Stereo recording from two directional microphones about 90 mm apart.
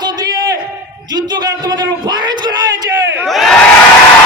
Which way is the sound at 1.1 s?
50° right (ahead or behind).